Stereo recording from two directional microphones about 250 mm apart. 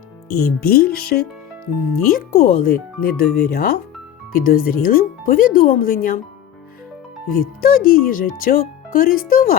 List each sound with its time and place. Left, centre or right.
0.3 s speech: left
7.3 s speech: left